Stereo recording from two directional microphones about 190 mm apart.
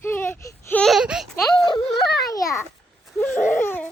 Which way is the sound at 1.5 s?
25° left (ahead or behind).